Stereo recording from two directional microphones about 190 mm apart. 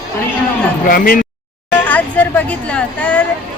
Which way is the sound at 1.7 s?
10° left (ahead or behind).